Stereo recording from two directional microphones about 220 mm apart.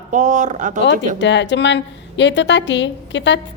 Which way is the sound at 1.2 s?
55° left (ahead or behind).